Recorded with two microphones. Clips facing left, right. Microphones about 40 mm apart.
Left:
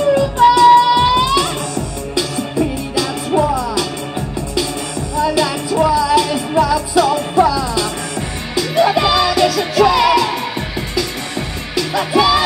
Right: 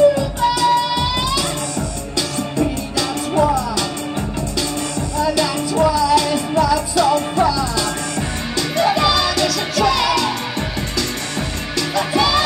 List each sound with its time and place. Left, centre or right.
0.1 s music: left
2.1 s music: centre
5.2 s music: centre
11.7 s music: centre